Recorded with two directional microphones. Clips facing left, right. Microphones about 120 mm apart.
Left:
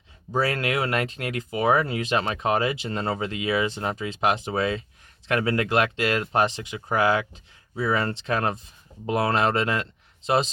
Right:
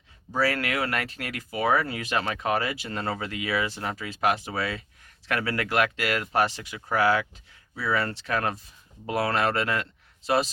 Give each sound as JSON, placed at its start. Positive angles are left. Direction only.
{"t": 0.3, "sound": "speech", "side_deg": 20}